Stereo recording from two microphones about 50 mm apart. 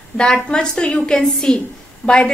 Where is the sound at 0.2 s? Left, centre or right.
Centre.